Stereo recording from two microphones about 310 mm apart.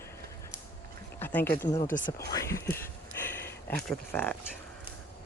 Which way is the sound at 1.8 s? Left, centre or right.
Left.